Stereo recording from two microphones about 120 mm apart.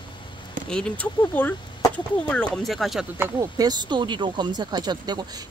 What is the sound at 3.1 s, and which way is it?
Speech, 25° right (ahead or behind).